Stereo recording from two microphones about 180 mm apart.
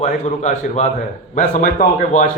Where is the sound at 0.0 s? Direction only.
45° left (ahead or behind).